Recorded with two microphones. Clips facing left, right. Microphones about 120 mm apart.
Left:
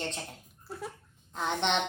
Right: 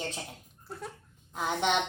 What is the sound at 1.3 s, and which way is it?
Speech, 5° right (ahead or behind).